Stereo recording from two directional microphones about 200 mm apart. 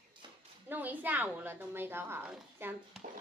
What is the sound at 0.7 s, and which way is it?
A woman's voice, 10° right (ahead or behind).